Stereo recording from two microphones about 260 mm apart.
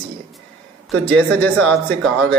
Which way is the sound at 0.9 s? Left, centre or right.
Centre.